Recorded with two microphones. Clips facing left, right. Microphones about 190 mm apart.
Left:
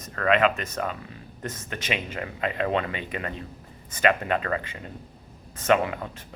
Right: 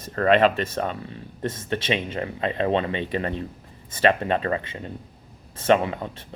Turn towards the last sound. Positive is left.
turn(degrees=-25)  # may be behind; listen again after turning